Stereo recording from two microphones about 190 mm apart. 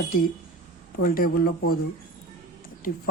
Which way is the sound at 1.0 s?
50° left (ahead or behind).